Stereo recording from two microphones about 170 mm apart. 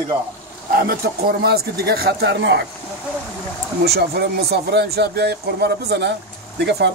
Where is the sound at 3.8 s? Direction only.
70° right (ahead or behind).